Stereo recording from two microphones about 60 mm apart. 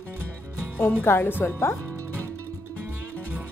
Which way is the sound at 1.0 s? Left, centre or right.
Left.